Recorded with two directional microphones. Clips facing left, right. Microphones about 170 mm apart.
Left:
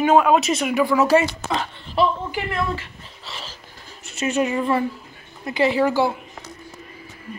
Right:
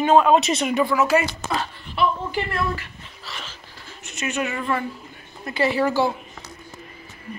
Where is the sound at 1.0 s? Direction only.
30° left (ahead or behind).